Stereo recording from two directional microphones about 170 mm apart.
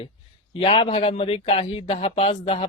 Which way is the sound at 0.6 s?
35° left (ahead or behind).